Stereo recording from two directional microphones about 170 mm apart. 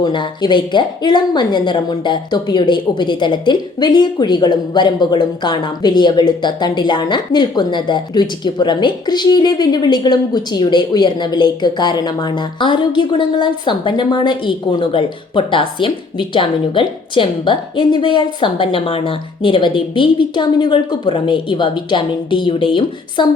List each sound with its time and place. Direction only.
0.0 s a woman's voice: 25° left (ahead or behind)